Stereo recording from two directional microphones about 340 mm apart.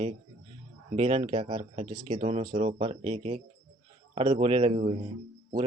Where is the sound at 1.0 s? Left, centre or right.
Centre.